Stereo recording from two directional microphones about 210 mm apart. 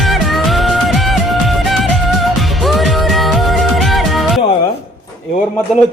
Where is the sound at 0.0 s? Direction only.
Centre (ahead or behind).